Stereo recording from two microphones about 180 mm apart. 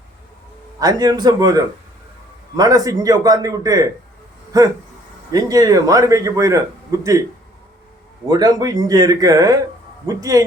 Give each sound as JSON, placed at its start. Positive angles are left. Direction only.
{"t": 0.8, "sound": "a man's voice", "side_deg": -20}
{"t": 8.3, "sound": "a man's voice", "side_deg": -20}